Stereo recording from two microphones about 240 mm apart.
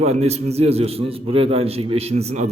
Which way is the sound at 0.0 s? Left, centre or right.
Right.